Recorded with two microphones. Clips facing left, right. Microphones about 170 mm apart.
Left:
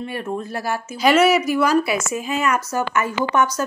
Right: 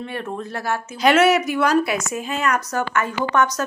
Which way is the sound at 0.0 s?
5° left (ahead or behind).